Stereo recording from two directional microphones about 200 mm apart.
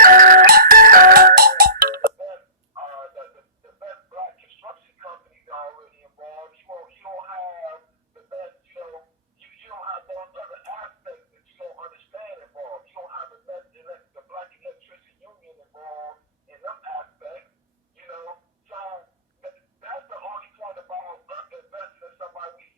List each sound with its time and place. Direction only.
0.0 s music: 45° right (ahead or behind)
6.7 s radio: 30° right (ahead or behind)
22.0 s a sound: 20° right (ahead or behind)